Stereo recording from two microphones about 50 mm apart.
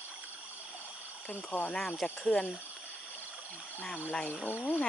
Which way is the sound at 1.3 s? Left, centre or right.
Left.